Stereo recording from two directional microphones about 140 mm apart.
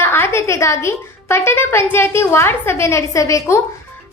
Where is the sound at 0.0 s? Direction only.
15° left (ahead or behind).